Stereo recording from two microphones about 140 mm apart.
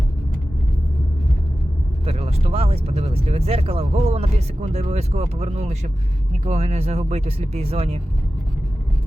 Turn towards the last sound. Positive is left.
turn(degrees=-45)  # may be behind; listen again after turning